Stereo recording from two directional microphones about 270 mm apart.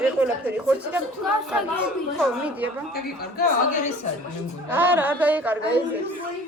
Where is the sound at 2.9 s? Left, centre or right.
Left.